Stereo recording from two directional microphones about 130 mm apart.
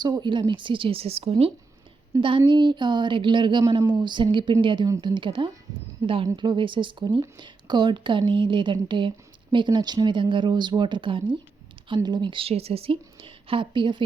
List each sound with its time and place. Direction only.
0.0 s a woman's voice: 35° right (ahead or behind)
2.1 s a woman's voice: 25° right (ahead or behind)
2.5 s a woman's voice: 35° right (ahead or behind)